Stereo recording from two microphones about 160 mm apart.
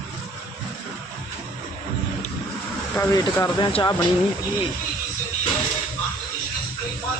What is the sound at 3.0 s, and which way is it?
Speech, 20° left (ahead or behind).